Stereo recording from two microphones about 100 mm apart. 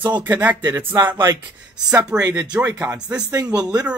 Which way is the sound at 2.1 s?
35° right (ahead or behind).